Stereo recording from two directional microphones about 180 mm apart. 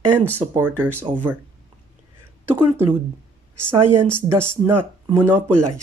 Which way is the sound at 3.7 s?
15° right (ahead or behind).